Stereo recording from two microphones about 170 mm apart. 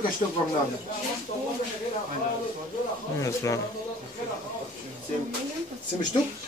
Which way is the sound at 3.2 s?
20° left (ahead or behind).